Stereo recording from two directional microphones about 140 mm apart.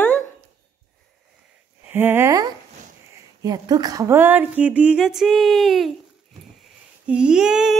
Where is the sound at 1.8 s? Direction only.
15° right (ahead or behind).